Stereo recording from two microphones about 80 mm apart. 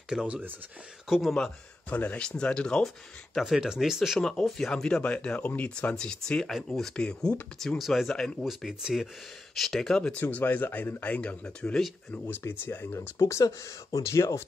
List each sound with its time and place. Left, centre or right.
0.1 s speech: centre
1.3 s speech: centre
3.3 s speech: centre
4.2 s speech: centre
10.1 s speech: left
12.1 s speech: left
13.2 s speech: left